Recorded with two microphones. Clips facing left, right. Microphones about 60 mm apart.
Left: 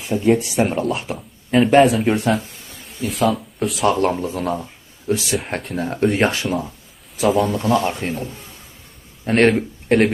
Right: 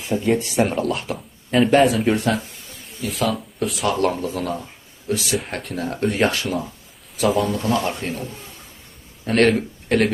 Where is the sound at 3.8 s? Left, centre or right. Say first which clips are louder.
Left 3 dB; left.